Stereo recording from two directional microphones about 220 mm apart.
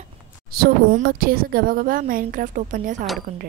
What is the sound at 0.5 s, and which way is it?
A woman's voice, 40° right (ahead or behind).